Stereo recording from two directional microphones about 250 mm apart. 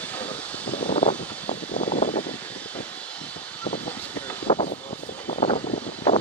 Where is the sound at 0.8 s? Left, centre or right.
Left.